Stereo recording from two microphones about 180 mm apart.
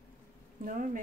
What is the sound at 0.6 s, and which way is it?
Speech, 50° right (ahead or behind).